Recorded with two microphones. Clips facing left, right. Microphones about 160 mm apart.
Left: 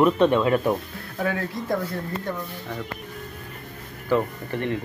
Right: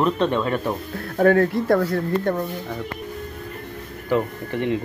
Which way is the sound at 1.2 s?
55° right (ahead or behind).